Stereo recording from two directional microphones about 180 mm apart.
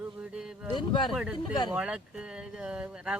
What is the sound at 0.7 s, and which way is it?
Speech, 25° left (ahead or behind).